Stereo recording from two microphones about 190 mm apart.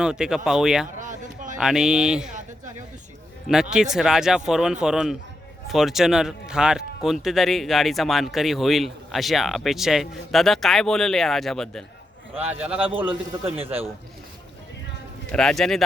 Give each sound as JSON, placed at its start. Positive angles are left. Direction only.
{"t": 0.0, "sound": "speech", "side_deg": -5}
{"t": 0.9, "sound": "a sound", "side_deg": -40}
{"t": 1.5, "sound": "speech", "side_deg": 0}
{"t": 3.5, "sound": "speech", "side_deg": -5}
{"t": 12.4, "sound": "a man's voice", "side_deg": -10}
{"t": 15.3, "sound": "speech", "side_deg": 5}